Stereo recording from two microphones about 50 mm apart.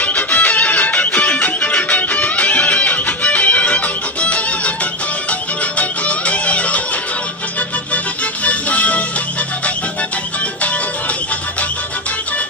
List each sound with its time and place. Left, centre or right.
0.0 s music: left
5.7 s music: left
8.4 s music: left